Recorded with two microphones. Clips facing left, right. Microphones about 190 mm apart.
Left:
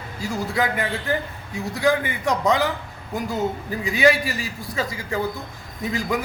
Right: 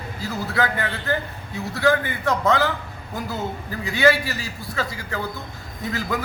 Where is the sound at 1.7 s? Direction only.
20° left (ahead or behind).